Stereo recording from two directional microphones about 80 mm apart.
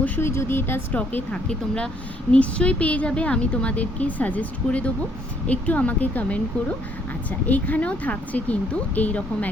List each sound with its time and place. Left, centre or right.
0.2 s speech: left
0.9 s a woman's voice: centre